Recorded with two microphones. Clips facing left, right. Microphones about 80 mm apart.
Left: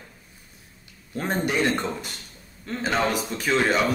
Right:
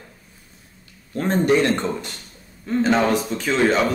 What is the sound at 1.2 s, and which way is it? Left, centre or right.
Speech, centre.